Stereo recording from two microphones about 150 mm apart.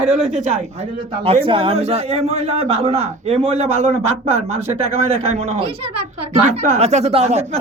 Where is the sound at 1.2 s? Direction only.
40° right (ahead or behind).